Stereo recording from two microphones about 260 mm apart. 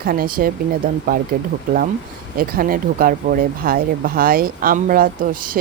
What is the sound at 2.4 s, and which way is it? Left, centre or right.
Speech, right.